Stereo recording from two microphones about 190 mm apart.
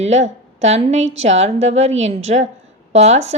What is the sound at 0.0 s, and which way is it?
Speech, 35° right (ahead or behind).